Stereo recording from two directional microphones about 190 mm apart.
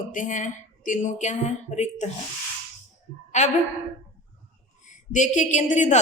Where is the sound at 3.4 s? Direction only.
40° left (ahead or behind).